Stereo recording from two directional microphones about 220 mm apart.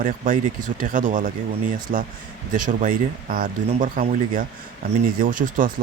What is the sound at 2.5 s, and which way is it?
Speech, 35° right (ahead or behind).